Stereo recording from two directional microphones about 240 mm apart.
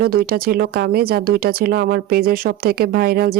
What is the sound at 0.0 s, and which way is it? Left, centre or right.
Speech, right.